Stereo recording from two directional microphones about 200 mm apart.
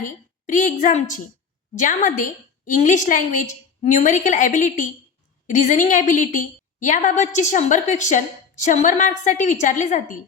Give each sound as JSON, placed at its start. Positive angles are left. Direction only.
{"t": 0.0, "sound": "a woman's voice", "side_deg": 40}